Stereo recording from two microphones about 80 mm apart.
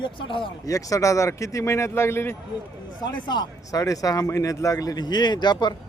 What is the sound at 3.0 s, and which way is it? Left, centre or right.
Speech, left.